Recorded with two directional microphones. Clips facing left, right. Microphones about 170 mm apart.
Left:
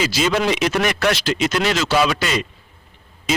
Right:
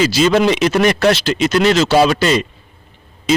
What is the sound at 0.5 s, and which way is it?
A man's voice, 35° right (ahead or behind).